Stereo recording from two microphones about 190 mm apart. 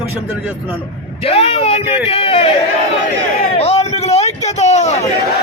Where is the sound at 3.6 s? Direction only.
35° left (ahead or behind).